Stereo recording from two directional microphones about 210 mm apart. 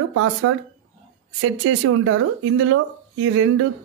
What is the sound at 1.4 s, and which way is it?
Speech, 75° right (ahead or behind).